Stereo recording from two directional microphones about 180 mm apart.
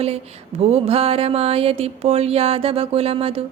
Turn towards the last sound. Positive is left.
turn(degrees=-30)  # may be behind; listen again after turning